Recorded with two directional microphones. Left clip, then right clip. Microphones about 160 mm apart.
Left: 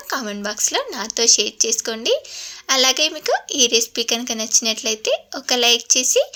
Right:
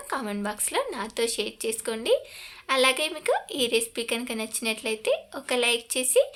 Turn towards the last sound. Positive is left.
turn(degrees=30)  # may be behind; listen again after turning